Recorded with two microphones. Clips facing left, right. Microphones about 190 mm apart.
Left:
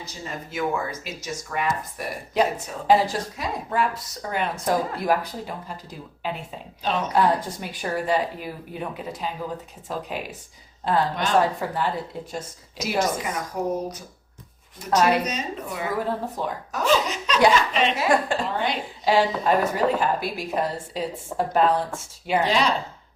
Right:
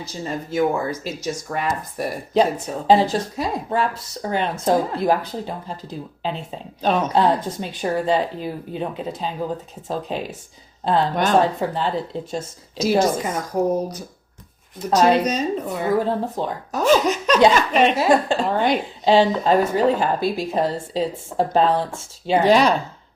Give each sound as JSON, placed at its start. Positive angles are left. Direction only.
{"t": 0.3, "sound": "speech", "side_deg": -35}
{"t": 11.1, "sound": "speech", "side_deg": -45}
{"t": 11.3, "sound": "speech", "side_deg": -25}
{"t": 14.9, "sound": "speech", "side_deg": -30}
{"t": 16.8, "sound": "speech", "side_deg": -45}
{"t": 17.9, "sound": "speech", "side_deg": -25}
{"t": 18.4, "sound": "speech", "side_deg": -50}
{"t": 19.0, "sound": "speech", "side_deg": -25}
{"t": 22.4, "sound": "speech", "side_deg": -50}